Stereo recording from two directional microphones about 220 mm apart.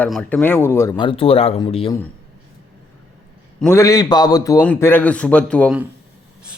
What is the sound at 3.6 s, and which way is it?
A man's voice, 15° left (ahead or behind).